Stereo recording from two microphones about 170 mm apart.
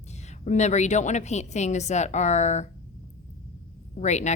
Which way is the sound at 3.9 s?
45° left (ahead or behind).